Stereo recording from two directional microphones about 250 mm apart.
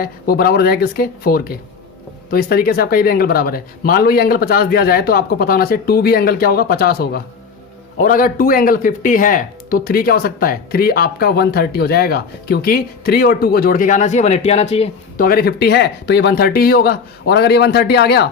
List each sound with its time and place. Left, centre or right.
0.0 s speech: left
15.3 s speech: left